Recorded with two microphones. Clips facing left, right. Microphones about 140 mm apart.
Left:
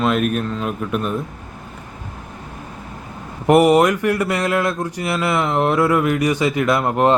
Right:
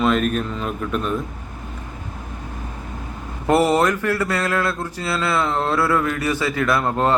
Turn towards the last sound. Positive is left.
turn(degrees=20)  # may be behind; listen again after turning